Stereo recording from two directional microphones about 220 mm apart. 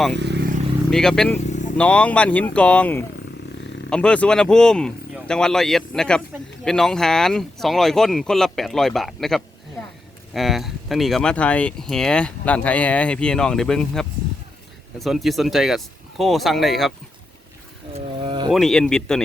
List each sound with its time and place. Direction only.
0.2 s speech: 50° right (ahead or behind)
0.9 s speech: 5° left (ahead or behind)
1.5 s vehicle: 35° left (ahead or behind)
1.8 s speech: 5° left (ahead or behind)
17.9 s a sound: 25° right (ahead or behind)
18.5 s speech: centre (ahead or behind)